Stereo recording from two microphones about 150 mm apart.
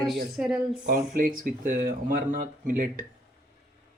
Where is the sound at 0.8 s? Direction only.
70° right (ahead or behind).